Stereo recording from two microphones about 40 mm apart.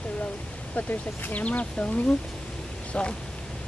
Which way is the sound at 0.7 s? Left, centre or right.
Left.